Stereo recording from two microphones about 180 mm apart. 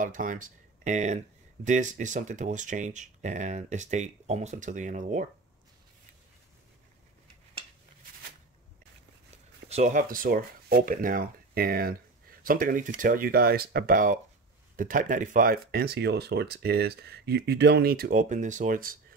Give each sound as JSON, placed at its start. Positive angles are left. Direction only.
{"t": 0.0, "sound": "speech", "side_deg": -45}
{"t": 9.7, "sound": "speech", "side_deg": -40}